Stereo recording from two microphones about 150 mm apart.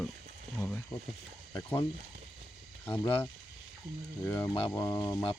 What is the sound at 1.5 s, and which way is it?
Speech, 15° left (ahead or behind).